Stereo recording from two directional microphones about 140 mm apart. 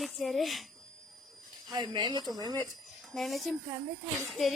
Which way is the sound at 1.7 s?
30° right (ahead or behind).